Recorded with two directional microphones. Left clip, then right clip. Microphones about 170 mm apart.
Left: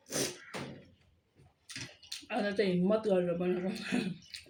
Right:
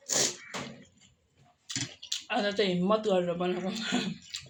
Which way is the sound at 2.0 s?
15° left (ahead or behind).